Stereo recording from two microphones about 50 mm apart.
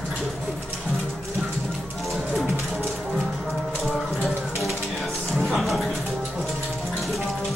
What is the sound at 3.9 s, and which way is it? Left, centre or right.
Music, centre.